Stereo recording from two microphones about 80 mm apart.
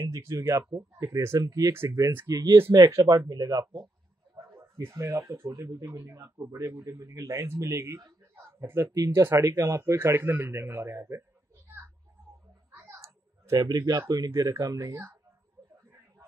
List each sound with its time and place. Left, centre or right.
0.0 s speech: right
1.7 s speech: right
2.2 s speech: right
2.5 s speech: right
2.8 s speech: right
4.6 s speech: right
8.9 s speech: right
12.7 s speech: right